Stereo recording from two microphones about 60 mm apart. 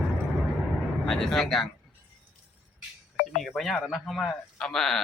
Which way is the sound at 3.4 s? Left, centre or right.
Centre.